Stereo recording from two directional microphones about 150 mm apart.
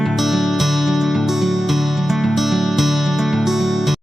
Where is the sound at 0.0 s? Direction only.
Centre (ahead or behind).